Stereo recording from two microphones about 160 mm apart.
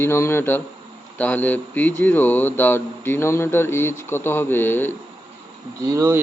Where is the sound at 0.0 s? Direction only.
15° left (ahead or behind).